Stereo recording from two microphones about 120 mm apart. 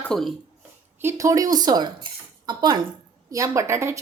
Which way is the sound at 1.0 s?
25° right (ahead or behind).